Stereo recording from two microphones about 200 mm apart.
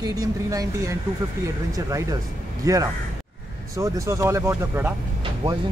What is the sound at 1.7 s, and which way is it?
Speech, 15° right (ahead or behind).